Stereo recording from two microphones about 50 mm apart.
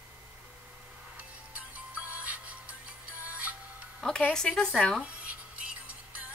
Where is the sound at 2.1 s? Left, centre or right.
Right.